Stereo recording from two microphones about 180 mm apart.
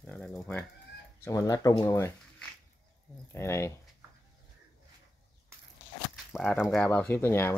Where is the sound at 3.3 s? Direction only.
15° left (ahead or behind).